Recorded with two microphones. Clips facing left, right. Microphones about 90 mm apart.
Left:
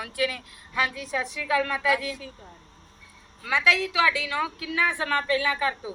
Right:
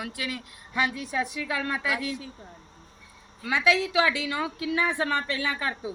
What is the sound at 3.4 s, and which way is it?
A woman's voice, 15° right (ahead or behind).